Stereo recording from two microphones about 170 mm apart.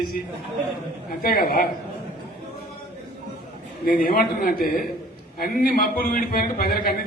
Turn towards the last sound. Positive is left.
turn(degrees=60)  # may be behind; listen again after turning